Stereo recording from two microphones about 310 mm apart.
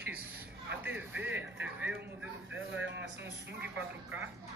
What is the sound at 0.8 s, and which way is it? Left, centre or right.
A man's voice, centre.